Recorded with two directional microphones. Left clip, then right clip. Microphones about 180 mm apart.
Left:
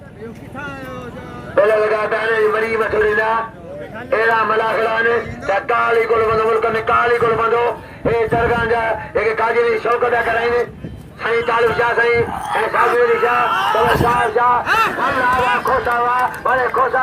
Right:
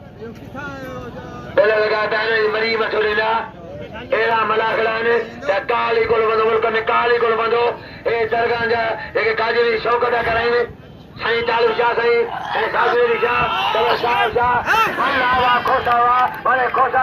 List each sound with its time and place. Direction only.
1.5 s a sound: 5° left (ahead or behind)
2.6 s speech: 5° right (ahead or behind)
12.5 s speech: 25° left (ahead or behind)
13.0 s speech: centre (ahead or behind)
14.6 s speech: 45° right (ahead or behind)
15.1 s speech: 10° left (ahead or behind)